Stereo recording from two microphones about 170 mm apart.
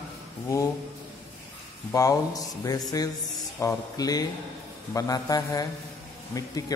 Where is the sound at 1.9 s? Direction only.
20° left (ahead or behind).